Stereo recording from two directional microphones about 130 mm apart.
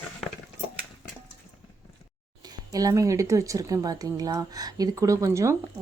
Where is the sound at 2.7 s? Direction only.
25° right (ahead or behind).